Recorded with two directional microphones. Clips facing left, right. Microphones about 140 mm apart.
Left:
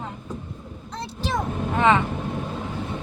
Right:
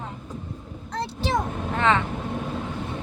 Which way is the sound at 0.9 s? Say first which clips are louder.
Right 2 dB; 70° right (ahead or behind).